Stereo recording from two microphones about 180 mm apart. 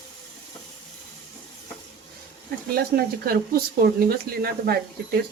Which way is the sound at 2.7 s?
55° right (ahead or behind).